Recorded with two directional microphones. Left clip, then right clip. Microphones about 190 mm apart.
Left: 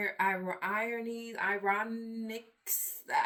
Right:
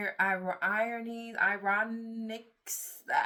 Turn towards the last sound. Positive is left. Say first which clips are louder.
# right 1 dB
turn(degrees=-30)  # may be behind; listen again after turning